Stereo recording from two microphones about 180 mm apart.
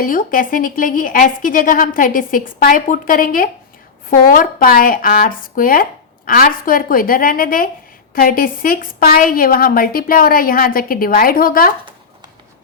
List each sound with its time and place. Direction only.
0.0 s a woman's voice: 50° left (ahead or behind)